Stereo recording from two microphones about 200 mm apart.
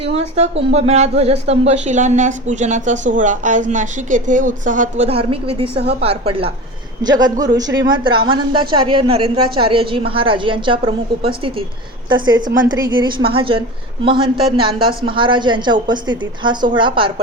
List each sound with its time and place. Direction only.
0.0 s a woman's voice: 30° right (ahead or behind)
5.7 s a woman's voice: 55° right (ahead or behind)
6.0 s a woman's voice: 30° right (ahead or behind)